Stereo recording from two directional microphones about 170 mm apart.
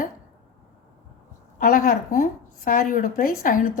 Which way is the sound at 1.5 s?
55° left (ahead or behind).